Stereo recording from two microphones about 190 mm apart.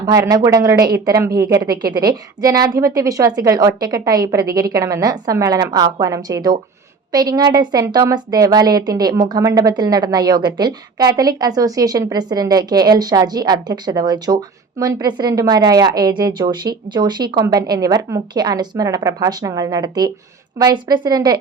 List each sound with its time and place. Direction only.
0.0 s a woman's voice: 20° right (ahead or behind)